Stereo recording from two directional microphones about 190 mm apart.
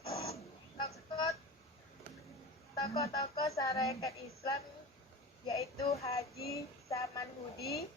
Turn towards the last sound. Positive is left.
turn(degrees=15)  # may be behind; listen again after turning